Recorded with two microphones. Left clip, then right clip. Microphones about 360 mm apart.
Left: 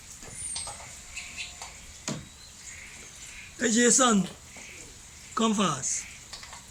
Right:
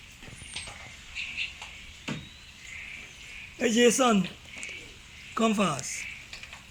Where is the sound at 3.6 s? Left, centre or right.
Centre.